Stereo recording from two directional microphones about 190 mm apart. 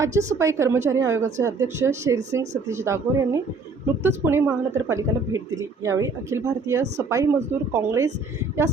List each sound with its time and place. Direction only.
0.0 s a woman's voice: 15° right (ahead or behind)